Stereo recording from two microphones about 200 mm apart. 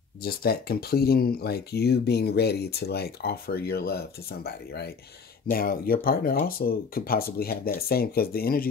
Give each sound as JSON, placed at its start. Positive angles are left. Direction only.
{"t": 0.2, "sound": "speech", "side_deg": 50}